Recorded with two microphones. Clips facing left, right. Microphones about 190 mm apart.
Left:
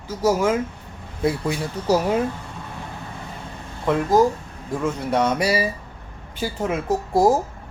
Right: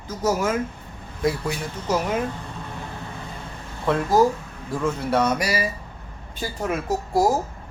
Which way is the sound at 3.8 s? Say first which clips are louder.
Left 1 dB; 15° left (ahead or behind).